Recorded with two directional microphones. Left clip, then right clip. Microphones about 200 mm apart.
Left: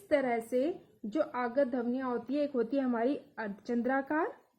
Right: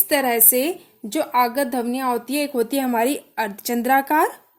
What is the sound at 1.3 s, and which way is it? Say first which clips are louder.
Speech: right 15 dB; 30° right (ahead or behind).